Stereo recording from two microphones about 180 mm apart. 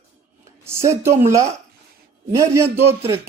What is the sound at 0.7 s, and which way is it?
Speech, 15° right (ahead or behind).